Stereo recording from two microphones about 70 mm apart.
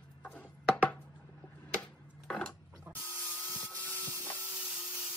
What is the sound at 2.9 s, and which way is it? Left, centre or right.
Mechanisms, right.